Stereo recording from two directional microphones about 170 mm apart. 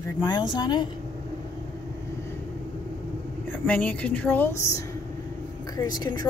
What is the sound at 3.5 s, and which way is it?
A woman's voice, 10° left (ahead or behind).